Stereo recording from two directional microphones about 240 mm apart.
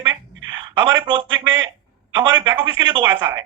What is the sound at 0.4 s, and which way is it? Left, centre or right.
Speech, centre.